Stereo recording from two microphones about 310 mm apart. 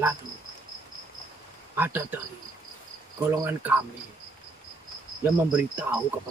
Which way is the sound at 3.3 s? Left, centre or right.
Centre.